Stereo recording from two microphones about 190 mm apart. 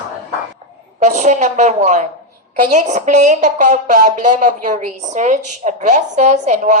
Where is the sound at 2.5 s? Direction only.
40° right (ahead or behind).